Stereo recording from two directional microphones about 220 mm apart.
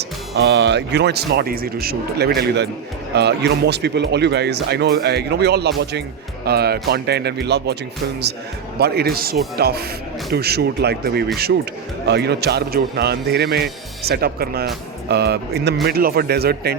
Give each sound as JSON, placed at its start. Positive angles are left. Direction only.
{"t": 0.3, "sound": "speech", "side_deg": -50}
{"t": 8.8, "sound": "speech", "side_deg": -45}